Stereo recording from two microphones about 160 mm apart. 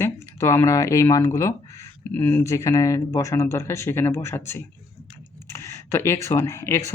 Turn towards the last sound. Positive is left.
turn(degrees=15)  # may be behind; listen again after turning